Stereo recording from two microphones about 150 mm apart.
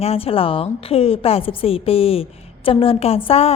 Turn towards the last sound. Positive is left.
turn(degrees=40)  # may be behind; listen again after turning